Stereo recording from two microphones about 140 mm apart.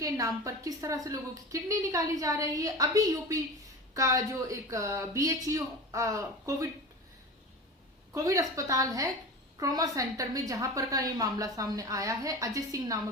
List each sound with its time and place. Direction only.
0.0 s a woman's voice: 25° right (ahead or behind)
8.1 s a woman's voice: 25° right (ahead or behind)